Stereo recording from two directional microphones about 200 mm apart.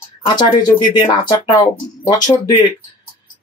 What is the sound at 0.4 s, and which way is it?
Speech, 20° left (ahead or behind).